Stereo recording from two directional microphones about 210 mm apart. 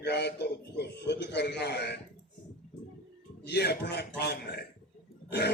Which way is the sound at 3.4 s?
55° left (ahead or behind).